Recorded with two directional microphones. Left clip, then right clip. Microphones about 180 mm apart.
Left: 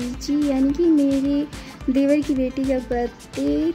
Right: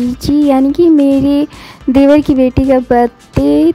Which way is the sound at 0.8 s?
50° right (ahead or behind).